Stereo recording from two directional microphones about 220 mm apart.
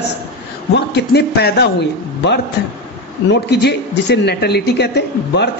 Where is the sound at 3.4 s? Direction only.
50° left (ahead or behind).